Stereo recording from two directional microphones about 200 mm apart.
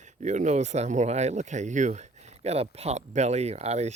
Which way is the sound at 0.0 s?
35° right (ahead or behind).